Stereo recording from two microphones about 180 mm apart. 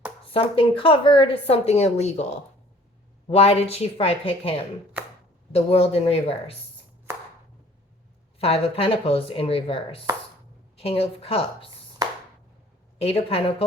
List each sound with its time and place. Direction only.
0.3 s speech: 30° left (ahead or behind)
8.4 s speech: 35° left (ahead or behind)
13.0 s speech: 35° left (ahead or behind)